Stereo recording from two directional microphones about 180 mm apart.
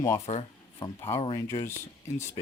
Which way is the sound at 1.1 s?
30° left (ahead or behind).